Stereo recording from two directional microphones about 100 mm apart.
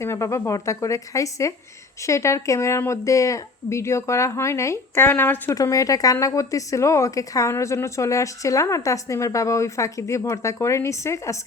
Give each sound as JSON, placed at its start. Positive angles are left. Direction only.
{"t": 0.0, "sound": "a woman's voice", "side_deg": 30}
{"t": 5.5, "sound": "a woman's voice", "side_deg": 35}